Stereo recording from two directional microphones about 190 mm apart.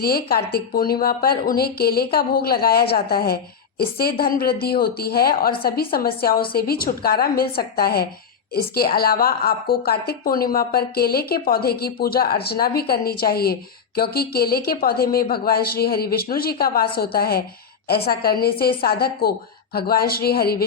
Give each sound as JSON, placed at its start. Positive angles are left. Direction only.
{"t": 0.0, "sound": "a woman's voice", "side_deg": 55}